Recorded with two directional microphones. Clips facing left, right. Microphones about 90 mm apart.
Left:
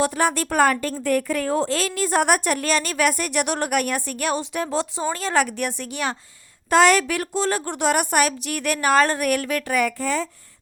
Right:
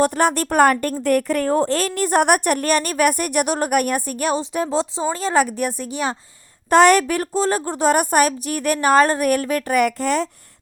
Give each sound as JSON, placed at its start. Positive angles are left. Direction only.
{"t": 0.0, "sound": "speech", "side_deg": -50}
{"t": 6.7, "sound": "speech", "side_deg": -45}
{"t": 9.7, "sound": "speech", "side_deg": -60}